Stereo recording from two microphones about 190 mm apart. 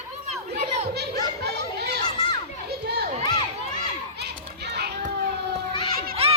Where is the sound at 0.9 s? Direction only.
60° right (ahead or behind).